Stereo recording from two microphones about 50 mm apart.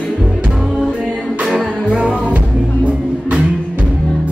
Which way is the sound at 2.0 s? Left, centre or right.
Right.